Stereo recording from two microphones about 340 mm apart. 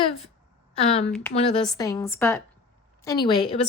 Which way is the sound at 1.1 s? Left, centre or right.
Centre.